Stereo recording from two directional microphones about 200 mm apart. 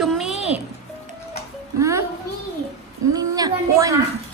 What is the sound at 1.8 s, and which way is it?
Speech, 15° right (ahead or behind).